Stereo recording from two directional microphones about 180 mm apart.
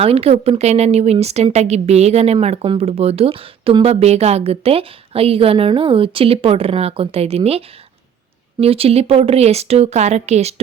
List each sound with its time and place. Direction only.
0.0 s speech: 35° right (ahead or behind)